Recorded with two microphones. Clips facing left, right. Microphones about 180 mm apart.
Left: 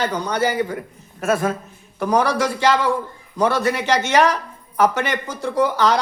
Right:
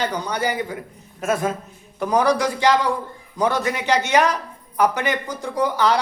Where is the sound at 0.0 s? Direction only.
15° right (ahead or behind).